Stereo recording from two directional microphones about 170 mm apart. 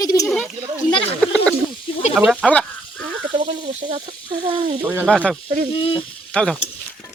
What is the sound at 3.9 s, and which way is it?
Speech, 30° right (ahead or behind).